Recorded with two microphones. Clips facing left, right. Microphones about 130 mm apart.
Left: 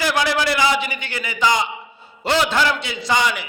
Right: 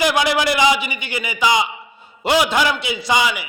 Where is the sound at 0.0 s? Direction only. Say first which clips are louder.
Right 2 dB; 15° right (ahead or behind).